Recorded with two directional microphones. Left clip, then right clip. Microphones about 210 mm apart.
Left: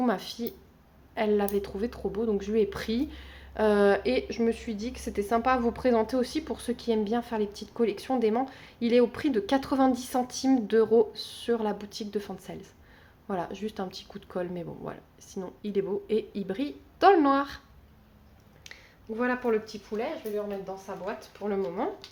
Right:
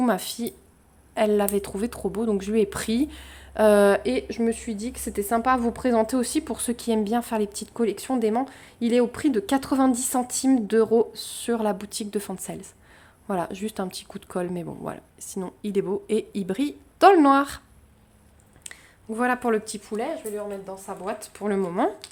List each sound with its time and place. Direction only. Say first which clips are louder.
0.0 s a woman's voice: right 4 dB; 30° right (ahead or behind)
18.7 s speech: right 3 dB; 45° right (ahead or behind)